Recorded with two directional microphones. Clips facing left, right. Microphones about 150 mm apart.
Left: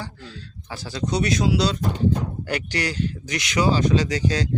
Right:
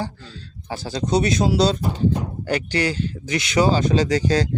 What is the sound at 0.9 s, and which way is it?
Speech, 25° right (ahead or behind).